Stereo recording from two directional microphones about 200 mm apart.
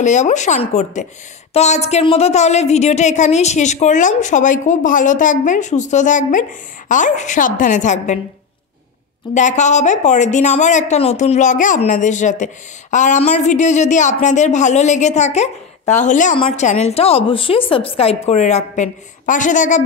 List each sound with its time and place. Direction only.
0.0 s speech: 35° left (ahead or behind)
9.3 s speech: 35° left (ahead or behind)